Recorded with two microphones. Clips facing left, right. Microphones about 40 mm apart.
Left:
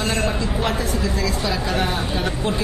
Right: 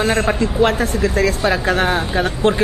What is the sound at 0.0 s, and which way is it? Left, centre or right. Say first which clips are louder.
A man's voice: right 6 dB; right.